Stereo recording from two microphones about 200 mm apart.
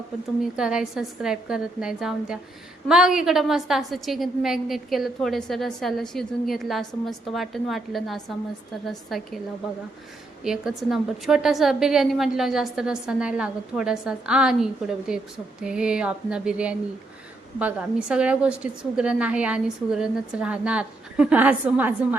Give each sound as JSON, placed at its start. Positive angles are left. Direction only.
{"t": 0.4, "sound": "a woman's voice", "side_deg": -5}
{"t": 10.4, "sound": "a woman's voice", "side_deg": 0}